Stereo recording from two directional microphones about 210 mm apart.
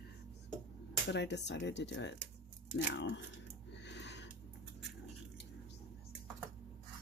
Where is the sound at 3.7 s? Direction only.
55° left (ahead or behind).